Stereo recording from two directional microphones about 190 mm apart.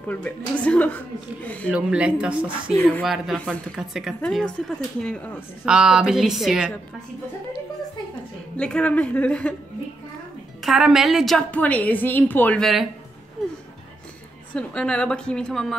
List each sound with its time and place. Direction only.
0.1 s a woman's voice: 5° left (ahead or behind)
1.7 s a woman's voice: 5° right (ahead or behind)
5.7 s a woman's voice: 5° right (ahead or behind)
8.5 s a woman's voice: 5° left (ahead or behind)
10.6 s a woman's voice: 5° right (ahead or behind)
14.5 s a woman's voice: 5° left (ahead or behind)